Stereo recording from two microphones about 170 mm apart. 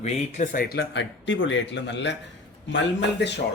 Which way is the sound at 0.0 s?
45° left (ahead or behind).